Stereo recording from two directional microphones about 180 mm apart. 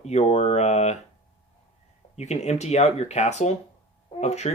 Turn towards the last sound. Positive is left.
turn(degrees=40)  # may be behind; listen again after turning